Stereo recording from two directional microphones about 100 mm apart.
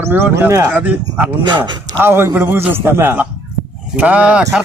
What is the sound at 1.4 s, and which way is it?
Speech, 50° right (ahead or behind).